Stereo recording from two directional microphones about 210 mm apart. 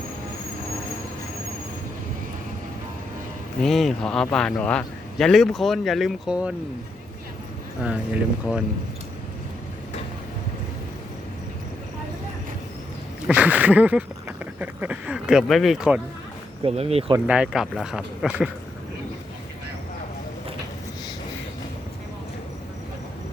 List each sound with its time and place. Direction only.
3.6 s speech: centre (ahead or behind)
7.8 s speech: 5° right (ahead or behind)
13.2 s a sound: 5° right (ahead or behind)
16.6 s speech: 30° right (ahead or behind)
17.2 s speech: 5° right (ahead or behind)